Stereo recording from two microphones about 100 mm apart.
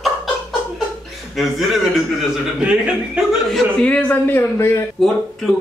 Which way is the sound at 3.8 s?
15° left (ahead or behind).